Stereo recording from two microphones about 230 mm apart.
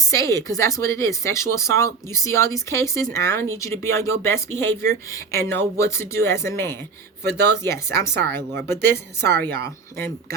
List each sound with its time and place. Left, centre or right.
0.1 s speech: centre
9.2 s a woman's voice: right